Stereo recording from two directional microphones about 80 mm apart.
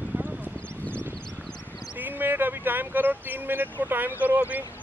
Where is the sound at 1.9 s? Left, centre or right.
Right.